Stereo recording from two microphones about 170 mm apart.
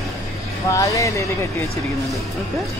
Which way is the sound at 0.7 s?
20° left (ahead or behind).